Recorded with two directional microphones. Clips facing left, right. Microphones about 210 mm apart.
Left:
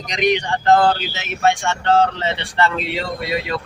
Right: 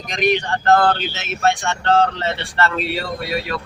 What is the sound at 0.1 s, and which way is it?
Speech, 15° left (ahead or behind).